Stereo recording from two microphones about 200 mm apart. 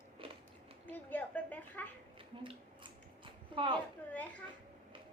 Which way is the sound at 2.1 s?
25° right (ahead or behind).